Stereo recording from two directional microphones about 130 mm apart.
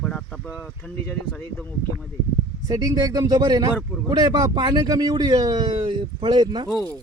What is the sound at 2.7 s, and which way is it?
Speech, 30° right (ahead or behind).